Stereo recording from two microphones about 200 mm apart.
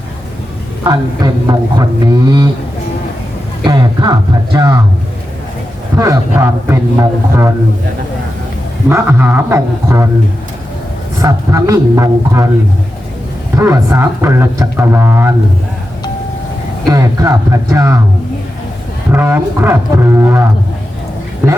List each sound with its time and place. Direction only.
0.9 s speech: 20° right (ahead or behind)
3.6 s a sound: 20° right (ahead or behind)
4.5 s speech: 15° right (ahead or behind)
6.0 s speech: 15° right (ahead or behind)
8.9 s speech: 10° right (ahead or behind)
11.2 s speech: 15° right (ahead or behind)
13.6 s speech: 15° right (ahead or behind)
16.9 s speech: 15° right (ahead or behind)
19.1 s speech: 10° right (ahead or behind)